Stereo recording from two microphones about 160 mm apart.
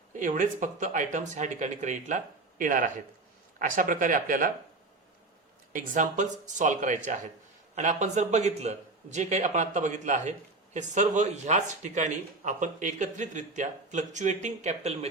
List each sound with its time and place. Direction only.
0.1 s speech: 55° right (ahead or behind)
5.7 s speech: 55° right (ahead or behind)